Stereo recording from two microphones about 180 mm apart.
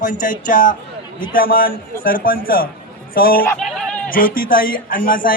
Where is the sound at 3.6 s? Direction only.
5° left (ahead or behind).